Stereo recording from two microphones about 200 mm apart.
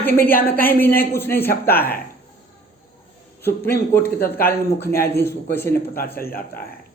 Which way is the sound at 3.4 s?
10° left (ahead or behind).